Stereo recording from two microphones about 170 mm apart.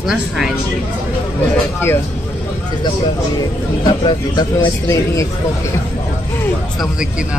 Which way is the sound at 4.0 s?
20° left (ahead or behind).